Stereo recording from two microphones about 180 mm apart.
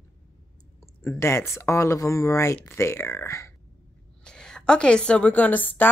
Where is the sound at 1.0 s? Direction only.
15° left (ahead or behind).